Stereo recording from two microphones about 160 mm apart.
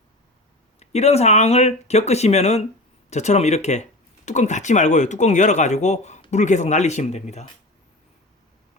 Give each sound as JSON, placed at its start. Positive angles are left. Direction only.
{"t": 0.8, "sound": "speech", "side_deg": 40}